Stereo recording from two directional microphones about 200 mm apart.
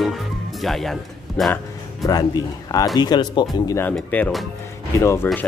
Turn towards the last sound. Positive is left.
turn(degrees=15)  # may be behind; listen again after turning